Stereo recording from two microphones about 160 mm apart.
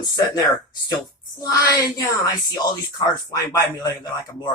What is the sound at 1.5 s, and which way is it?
Speech, 20° left (ahead or behind).